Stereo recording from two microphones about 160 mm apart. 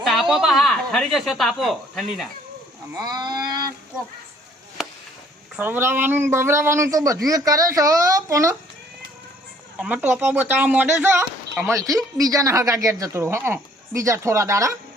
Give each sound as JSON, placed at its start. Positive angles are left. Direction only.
{"t": 0.0, "sound": "speech", "side_deg": 0}
{"t": 2.9, "sound": "speech", "side_deg": -25}
{"t": 5.5, "sound": "speech", "side_deg": -10}
{"t": 9.7, "sound": "speech", "side_deg": -10}